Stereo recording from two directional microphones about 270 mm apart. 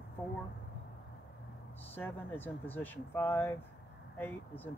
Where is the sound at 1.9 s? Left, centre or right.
Centre.